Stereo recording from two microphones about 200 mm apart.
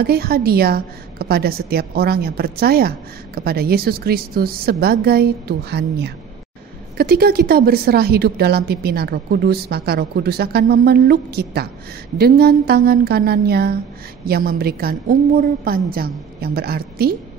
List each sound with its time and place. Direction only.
0.0 s speech: 50° right (ahead or behind)